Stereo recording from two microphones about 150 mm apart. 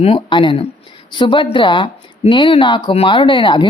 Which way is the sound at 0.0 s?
35° left (ahead or behind).